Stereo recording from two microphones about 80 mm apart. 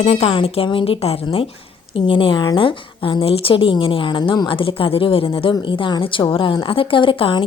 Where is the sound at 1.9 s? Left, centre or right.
Left.